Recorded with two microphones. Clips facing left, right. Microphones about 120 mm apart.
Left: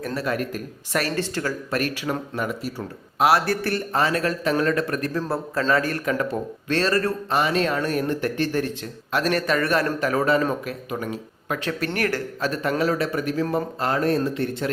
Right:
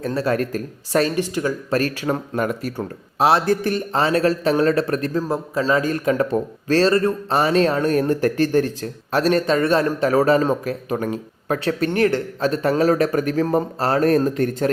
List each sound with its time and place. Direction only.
0.0 s speech: 30° right (ahead or behind)
1.0 s speech: 15° right (ahead or behind)
1.7 s speech: 35° right (ahead or behind)
3.2 s a man's voice: 25° right (ahead or behind)
5.3 s a man's voice: 20° right (ahead or behind)
7.3 s speech: 35° right (ahead or behind)